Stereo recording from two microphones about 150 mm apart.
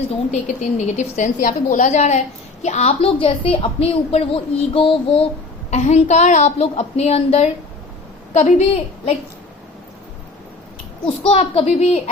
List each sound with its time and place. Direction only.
0.3 s a woman's voice: 50° left (ahead or behind)
11.2 s a woman's voice: 40° left (ahead or behind)